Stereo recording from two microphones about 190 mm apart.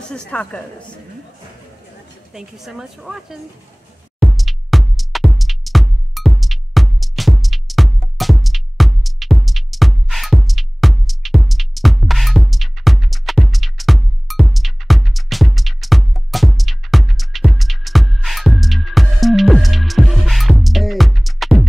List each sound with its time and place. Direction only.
0.1 s a woman's voice: 5° left (ahead or behind)
2.3 s speech: centre (ahead or behind)
4.2 s music: centre (ahead or behind)